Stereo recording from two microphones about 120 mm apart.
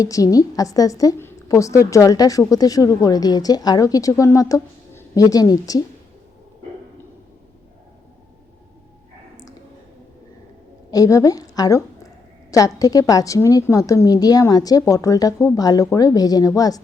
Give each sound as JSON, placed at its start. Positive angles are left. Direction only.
{"t": 0.0, "sound": "a woman's voice", "side_deg": 30}
{"t": 10.9, "sound": "a woman's voice", "side_deg": 30}